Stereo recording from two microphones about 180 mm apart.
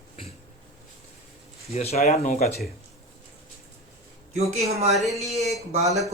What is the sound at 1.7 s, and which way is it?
Speech, 35° left (ahead or behind).